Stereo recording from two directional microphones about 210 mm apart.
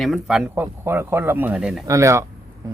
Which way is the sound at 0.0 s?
5° right (ahead or behind).